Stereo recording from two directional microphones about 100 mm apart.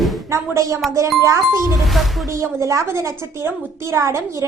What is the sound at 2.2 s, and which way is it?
A woman's voice, 30° right (ahead or behind).